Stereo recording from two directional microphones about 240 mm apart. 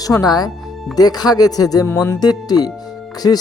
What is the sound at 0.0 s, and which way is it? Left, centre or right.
Speech, centre.